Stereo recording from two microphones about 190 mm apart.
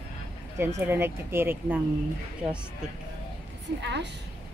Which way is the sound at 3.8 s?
65° right (ahead or behind).